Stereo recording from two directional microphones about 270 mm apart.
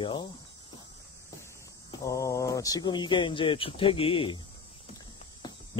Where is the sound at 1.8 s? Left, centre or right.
Centre.